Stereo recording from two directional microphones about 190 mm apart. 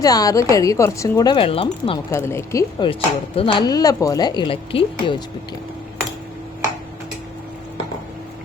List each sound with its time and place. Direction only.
0.0 s speech: 20° left (ahead or behind)
2.0 s speech: 15° left (ahead or behind)